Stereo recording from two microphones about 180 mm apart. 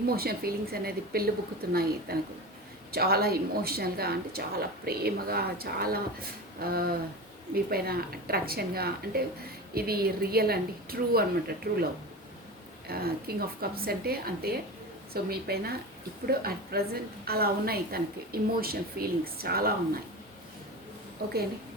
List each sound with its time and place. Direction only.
0.2 s a woman's voice: 60° right (ahead or behind)
12.9 s a woman's voice: 60° right (ahead or behind)